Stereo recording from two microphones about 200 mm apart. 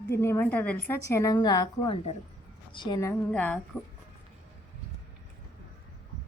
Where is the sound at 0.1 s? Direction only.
10° left (ahead or behind).